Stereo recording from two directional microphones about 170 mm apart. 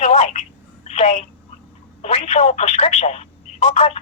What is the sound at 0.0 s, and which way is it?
Telephone, 45° left (ahead or behind).